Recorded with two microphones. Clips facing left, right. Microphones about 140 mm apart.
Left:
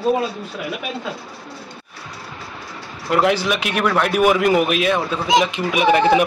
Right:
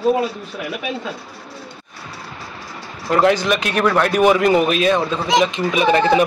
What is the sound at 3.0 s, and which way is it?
Speech, 5° left (ahead or behind).